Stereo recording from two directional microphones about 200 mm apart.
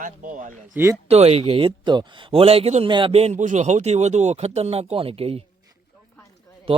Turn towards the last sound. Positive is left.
turn(degrees=-30)  # may be behind; listen again after turning